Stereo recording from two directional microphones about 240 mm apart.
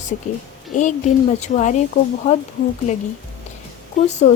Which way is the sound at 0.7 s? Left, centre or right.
Left.